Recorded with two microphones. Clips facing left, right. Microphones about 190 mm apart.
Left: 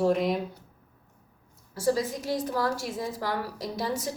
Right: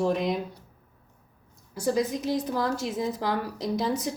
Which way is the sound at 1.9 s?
20° right (ahead or behind).